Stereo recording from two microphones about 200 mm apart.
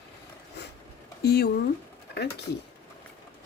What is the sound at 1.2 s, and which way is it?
Speech, 55° left (ahead or behind).